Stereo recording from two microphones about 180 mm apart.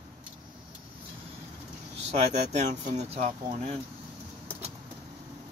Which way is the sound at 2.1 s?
40° right (ahead or behind).